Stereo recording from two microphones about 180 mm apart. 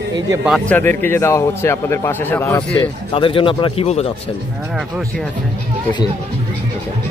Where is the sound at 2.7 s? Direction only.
30° left (ahead or behind).